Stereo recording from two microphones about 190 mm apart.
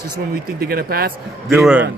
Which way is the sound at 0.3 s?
55° right (ahead or behind).